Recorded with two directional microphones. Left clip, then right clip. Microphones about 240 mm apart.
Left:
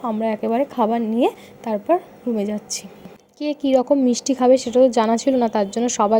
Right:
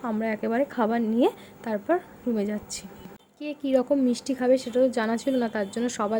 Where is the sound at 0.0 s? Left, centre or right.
Centre.